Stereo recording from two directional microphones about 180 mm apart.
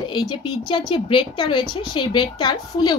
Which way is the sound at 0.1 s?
25° left (ahead or behind).